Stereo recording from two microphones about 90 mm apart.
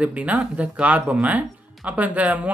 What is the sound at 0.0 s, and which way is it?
Speech, 15° right (ahead or behind).